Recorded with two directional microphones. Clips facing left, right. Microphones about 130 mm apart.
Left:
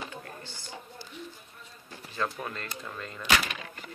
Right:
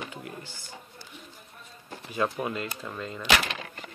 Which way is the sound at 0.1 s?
15° right (ahead or behind).